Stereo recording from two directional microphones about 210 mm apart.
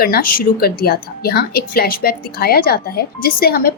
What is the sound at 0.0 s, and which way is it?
Speech, 45° left (ahead or behind).